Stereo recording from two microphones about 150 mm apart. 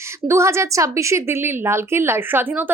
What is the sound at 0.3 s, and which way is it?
A woman's voice, 20° right (ahead or behind).